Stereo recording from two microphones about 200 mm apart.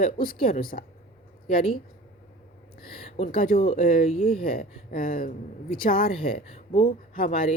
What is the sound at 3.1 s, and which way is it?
Speech, 40° left (ahead or behind).